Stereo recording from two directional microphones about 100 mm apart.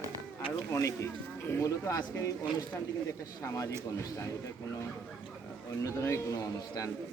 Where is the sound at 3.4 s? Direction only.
35° left (ahead or behind).